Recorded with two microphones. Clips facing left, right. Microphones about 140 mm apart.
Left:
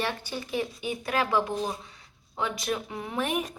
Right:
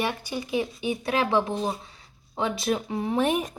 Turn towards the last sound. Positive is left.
turn(degrees=-30)  # may be behind; listen again after turning